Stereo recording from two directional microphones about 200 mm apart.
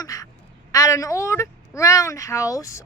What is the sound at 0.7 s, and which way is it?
A woman's voice, 15° left (ahead or behind).